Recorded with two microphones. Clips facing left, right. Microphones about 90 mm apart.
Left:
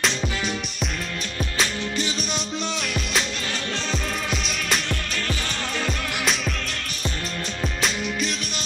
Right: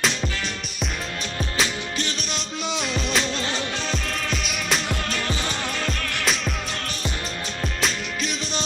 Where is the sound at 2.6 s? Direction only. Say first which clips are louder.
Right 1 dB; 20° right (ahead or behind).